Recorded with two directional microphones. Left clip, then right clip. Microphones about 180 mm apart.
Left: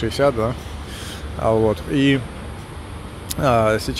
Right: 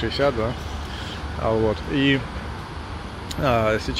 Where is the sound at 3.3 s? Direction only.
25° left (ahead or behind).